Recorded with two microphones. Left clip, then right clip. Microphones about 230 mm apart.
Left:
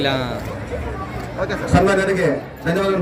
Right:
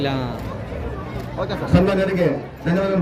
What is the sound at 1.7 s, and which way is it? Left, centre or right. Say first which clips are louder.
A man's voice: left 3 dB; left.